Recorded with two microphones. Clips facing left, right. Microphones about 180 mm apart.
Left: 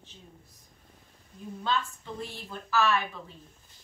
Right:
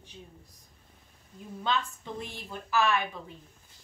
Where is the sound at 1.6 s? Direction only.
15° right (ahead or behind).